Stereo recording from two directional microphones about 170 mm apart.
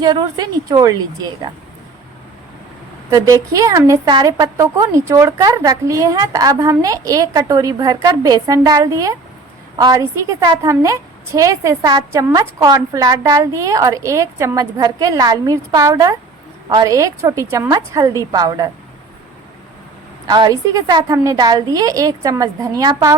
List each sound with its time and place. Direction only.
0.0 s a woman's voice: 25° right (ahead or behind)
3.1 s a woman's voice: 20° right (ahead or behind)
20.2 s a woman's voice: 25° right (ahead or behind)